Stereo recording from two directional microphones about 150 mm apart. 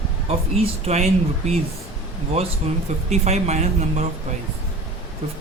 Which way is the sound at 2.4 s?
40° right (ahead or behind).